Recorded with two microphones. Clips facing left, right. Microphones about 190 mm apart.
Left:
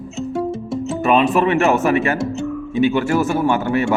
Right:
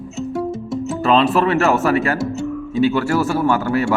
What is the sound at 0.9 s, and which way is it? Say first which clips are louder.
Speech: even; 20° left (ahead or behind).